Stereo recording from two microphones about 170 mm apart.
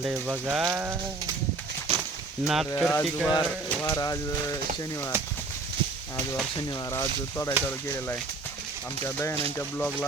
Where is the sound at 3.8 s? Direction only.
20° left (ahead or behind).